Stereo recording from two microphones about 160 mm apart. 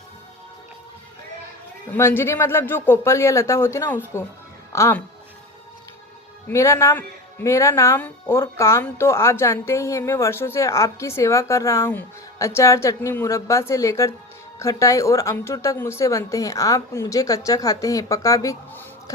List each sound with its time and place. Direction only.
1.9 s speech: 15° left (ahead or behind)
6.5 s speech: 20° left (ahead or behind)